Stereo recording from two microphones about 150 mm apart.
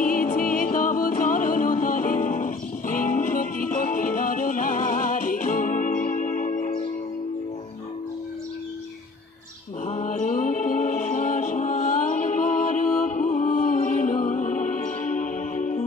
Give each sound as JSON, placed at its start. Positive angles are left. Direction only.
{"t": 0.0, "sound": "music", "side_deg": 65}
{"t": 9.8, "sound": "music", "side_deg": 55}